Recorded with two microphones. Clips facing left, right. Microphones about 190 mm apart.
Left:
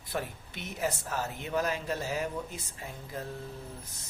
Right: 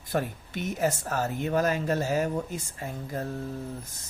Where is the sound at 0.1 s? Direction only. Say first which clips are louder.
Right 6 dB; 45° right (ahead or behind).